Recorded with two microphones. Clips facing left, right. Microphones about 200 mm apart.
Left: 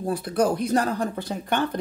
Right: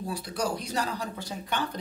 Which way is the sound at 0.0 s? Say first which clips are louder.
Left 8 dB; 55° left (ahead or behind).